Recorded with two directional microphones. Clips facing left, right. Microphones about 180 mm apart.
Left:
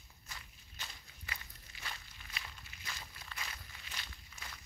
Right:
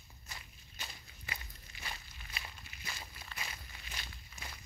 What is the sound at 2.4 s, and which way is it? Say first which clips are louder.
Walk: right 2 dB; 10° right (ahead or behind).